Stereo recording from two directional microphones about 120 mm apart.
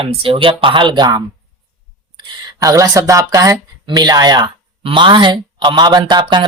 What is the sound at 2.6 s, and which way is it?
Speech, 25° right (ahead or behind).